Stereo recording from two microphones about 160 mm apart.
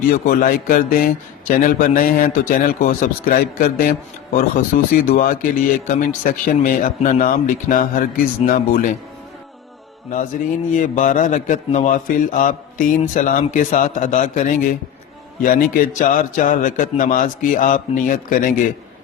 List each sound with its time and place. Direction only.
0.1 s a man's voice: 60° left (ahead or behind)
10.7 s a man's voice: 55° left (ahead or behind)